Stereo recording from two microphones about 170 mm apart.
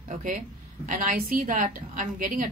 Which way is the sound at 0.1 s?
50° right (ahead or behind).